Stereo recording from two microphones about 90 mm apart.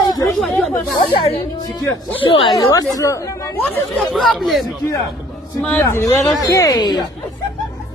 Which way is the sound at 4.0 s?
Centre (ahead or behind).